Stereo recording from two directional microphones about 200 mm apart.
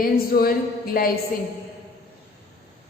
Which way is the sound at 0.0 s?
50° left (ahead or behind).